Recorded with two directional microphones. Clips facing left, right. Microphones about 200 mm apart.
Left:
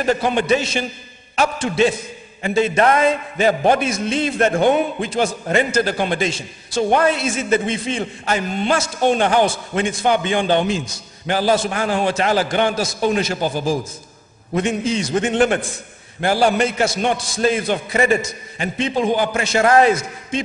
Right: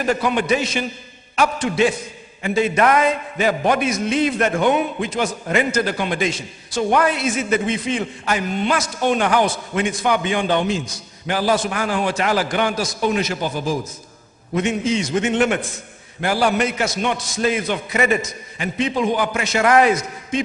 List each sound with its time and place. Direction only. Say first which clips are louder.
0.0 s a man's voice: left 1 dB; 30° left (ahead or behind)